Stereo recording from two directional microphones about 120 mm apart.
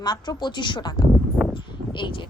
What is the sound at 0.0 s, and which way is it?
A woman's voice, 35° left (ahead or behind).